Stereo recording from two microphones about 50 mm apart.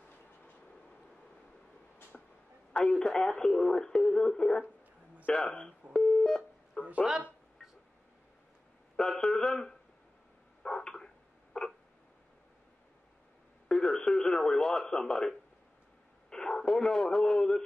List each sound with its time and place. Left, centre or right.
2.1 s a sound: centre
2.8 s speech: centre
5.9 s telephone dialing: centre
8.9 s speech: centre
10.6 s dog: centre
11.6 s a sound: centre
13.7 s radio: centre
16.3 s speech: centre